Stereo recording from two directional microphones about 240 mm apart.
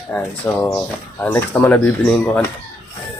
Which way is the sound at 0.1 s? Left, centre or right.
Centre.